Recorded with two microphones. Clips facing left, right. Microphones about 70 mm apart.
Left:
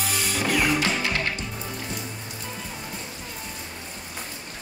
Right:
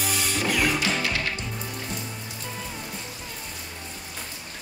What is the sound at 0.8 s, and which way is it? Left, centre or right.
Music, left.